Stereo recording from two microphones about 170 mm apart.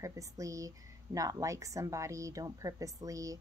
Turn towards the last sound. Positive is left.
turn(degrees=-20)  # may be behind; listen again after turning